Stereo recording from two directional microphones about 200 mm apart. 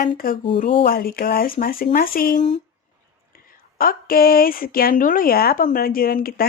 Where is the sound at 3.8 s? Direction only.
45° left (ahead or behind).